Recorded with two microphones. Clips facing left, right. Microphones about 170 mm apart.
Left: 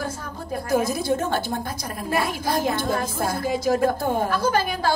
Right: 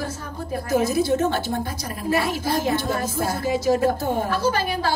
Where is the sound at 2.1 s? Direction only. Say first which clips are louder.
Right 2 dB; 50° left (ahead or behind).